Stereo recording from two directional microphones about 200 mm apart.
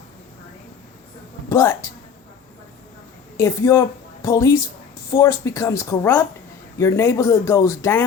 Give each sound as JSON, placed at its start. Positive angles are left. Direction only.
{"t": 1.5, "sound": "a woman's voice", "side_deg": 15}
{"t": 3.3, "sound": "a woman's voice", "side_deg": 15}